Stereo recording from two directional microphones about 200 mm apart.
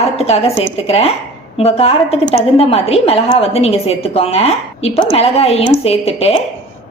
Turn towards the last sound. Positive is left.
turn(degrees=30)  # may be behind; listen again after turning